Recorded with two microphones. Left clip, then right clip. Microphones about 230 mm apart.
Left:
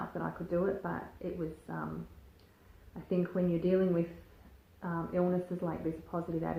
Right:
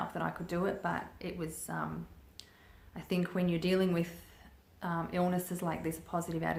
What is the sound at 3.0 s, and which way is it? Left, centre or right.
Speech, right.